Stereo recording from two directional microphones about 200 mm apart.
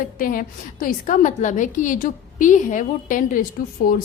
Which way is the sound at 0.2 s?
45° left (ahead or behind).